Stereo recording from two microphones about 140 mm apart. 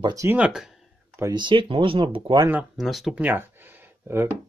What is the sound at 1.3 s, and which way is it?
Speech, 35° right (ahead or behind).